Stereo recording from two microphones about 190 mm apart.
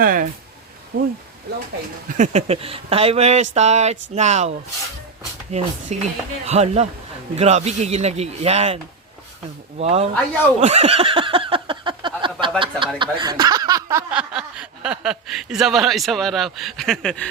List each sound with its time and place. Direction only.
0.0 s speech: 45° right (ahead or behind)
2.1 s speech: 35° right (ahead or behind)
10.6 s a sound: 35° right (ahead or behind)
13.0 s speech: 25° right (ahead or behind)
14.1 s speech: 5° right (ahead or behind)